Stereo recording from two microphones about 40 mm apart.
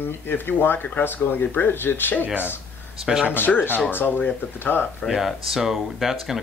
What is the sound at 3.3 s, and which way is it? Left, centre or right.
Speech, left.